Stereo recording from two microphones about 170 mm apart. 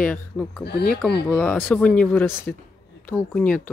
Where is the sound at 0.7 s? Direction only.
75° left (ahead or behind).